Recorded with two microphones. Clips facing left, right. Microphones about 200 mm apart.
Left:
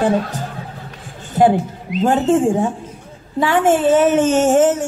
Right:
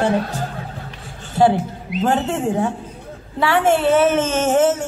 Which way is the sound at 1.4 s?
20° left (ahead or behind).